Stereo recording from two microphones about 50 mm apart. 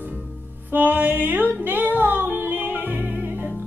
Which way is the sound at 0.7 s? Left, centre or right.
Right.